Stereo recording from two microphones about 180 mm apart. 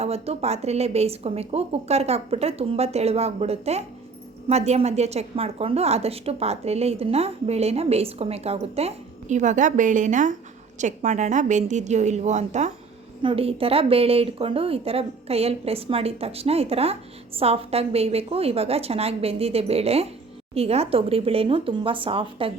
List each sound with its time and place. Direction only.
0.0 s a woman's voice: 35° right (ahead or behind)